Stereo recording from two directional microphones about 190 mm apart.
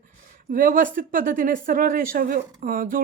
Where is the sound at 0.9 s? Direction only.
45° right (ahead or behind).